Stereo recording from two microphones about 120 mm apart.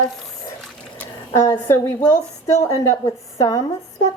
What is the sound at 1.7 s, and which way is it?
Speech, 20° left (ahead or behind).